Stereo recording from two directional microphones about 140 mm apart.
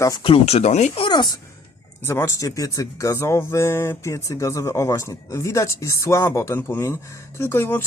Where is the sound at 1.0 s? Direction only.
30° left (ahead or behind).